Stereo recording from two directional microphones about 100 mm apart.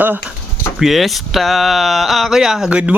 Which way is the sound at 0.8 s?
Centre (ahead or behind).